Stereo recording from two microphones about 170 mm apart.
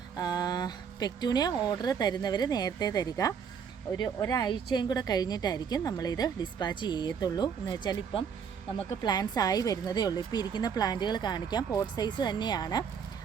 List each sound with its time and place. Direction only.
0.2 s a woman's voice: 25° left (ahead or behind)